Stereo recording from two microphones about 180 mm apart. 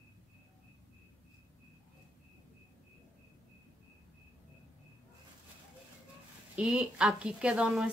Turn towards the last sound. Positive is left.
turn(degrees=-5)  # may be behind; listen again after turning